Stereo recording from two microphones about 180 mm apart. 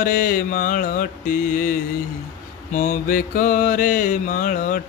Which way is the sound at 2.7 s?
45° left (ahead or behind).